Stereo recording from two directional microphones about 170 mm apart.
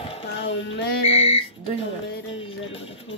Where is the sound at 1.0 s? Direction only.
35° left (ahead or behind).